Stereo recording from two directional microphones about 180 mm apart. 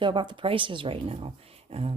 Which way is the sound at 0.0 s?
25° right (ahead or behind).